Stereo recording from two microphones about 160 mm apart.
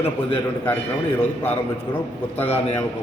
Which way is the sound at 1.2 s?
15° left (ahead or behind).